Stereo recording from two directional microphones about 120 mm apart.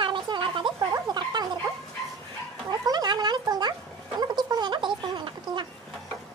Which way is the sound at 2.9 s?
35° right (ahead or behind).